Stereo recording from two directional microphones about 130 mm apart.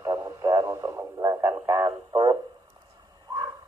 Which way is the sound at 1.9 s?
35° right (ahead or behind).